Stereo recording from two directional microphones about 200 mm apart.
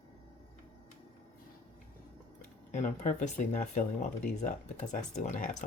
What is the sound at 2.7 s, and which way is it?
Speech, 35° left (ahead or behind).